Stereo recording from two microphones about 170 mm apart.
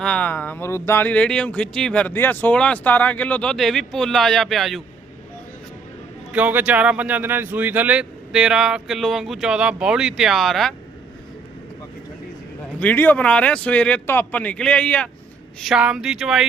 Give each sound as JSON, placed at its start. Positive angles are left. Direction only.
{"t": 0.0, "sound": "speech", "side_deg": 10}
{"t": 6.3, "sound": "speech", "side_deg": -10}
{"t": 12.8, "sound": "speech", "side_deg": 10}
{"t": 15.6, "sound": "speech", "side_deg": -5}